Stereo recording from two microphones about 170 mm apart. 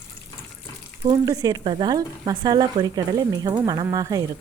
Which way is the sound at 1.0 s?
20° right (ahead or behind).